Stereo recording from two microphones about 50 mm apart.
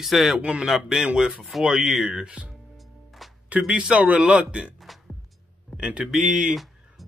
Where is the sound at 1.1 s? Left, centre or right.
Centre.